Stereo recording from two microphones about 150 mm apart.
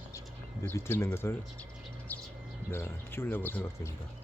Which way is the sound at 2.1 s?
10° left (ahead or behind).